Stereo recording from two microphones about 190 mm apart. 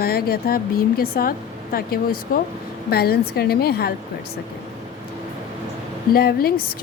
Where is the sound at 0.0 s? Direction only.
50° left (ahead or behind).